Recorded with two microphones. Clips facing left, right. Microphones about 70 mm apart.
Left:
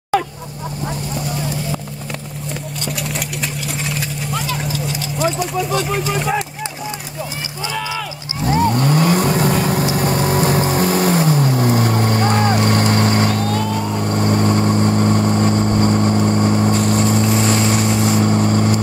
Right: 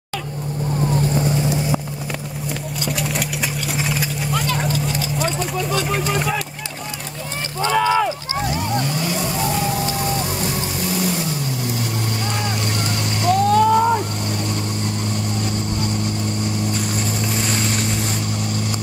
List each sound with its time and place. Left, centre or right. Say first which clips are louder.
2.8 s engine: right 2 dB; centre
3.7 s clip-clop: right 1 dB; centre
8.5 s vehicle: left 9 dB; left